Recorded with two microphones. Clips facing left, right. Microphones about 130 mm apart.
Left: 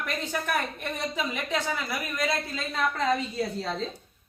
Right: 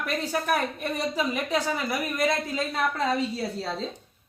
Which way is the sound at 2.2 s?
15° right (ahead or behind).